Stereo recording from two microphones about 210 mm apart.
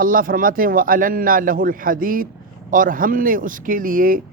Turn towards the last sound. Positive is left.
turn(degrees=-40)  # may be behind; listen again after turning